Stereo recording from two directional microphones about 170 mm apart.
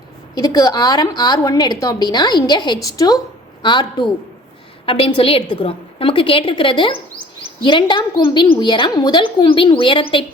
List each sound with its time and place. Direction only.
0.3 s a woman's voice: 20° left (ahead or behind)